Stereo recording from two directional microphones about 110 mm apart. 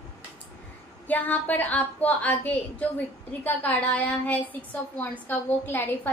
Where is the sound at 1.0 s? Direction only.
15° left (ahead or behind).